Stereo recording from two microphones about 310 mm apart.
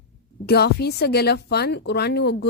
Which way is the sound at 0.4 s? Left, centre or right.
Left.